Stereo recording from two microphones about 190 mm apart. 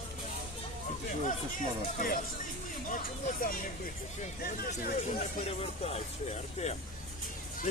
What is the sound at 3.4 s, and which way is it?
Speech, 50° left (ahead or behind).